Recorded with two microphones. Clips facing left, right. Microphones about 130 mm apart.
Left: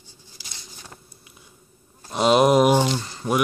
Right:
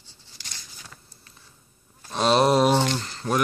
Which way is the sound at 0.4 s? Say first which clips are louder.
Even; 10° left (ahead or behind).